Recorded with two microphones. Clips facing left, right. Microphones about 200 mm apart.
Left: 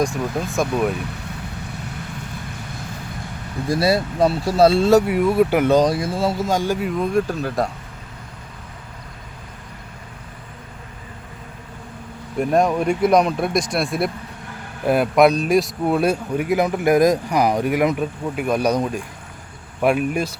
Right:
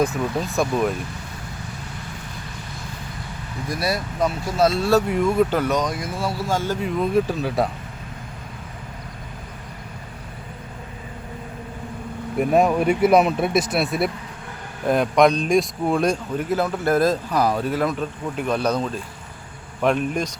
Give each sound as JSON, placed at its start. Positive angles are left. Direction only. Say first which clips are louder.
{"t": 0.0, "sound": "speech", "louder": "even", "side_deg": 0}
{"t": 3.7, "sound": "speech", "louder": "left 7 dB", "side_deg": 25}
{"t": 5.0, "sound": "speech", "louder": "left 2 dB", "side_deg": 5}
{"t": 5.6, "sound": "speech", "louder": "left 7 dB", "side_deg": 30}
{"t": 6.7, "sound": "speech", "louder": "even", "side_deg": 0}
{"t": 12.4, "sound": "speech", "louder": "even", "side_deg": -5}